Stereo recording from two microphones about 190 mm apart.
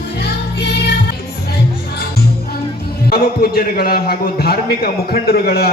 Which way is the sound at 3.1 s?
55° left (ahead or behind).